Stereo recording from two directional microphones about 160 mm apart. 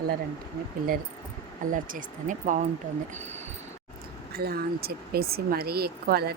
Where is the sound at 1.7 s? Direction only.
55° right (ahead or behind).